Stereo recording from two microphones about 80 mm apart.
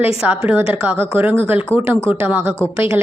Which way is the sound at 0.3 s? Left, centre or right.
Right.